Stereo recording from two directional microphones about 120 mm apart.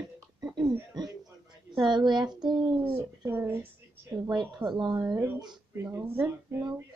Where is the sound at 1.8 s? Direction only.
40° right (ahead or behind).